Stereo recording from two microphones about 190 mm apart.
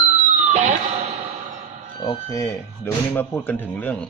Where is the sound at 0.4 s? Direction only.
40° right (ahead or behind).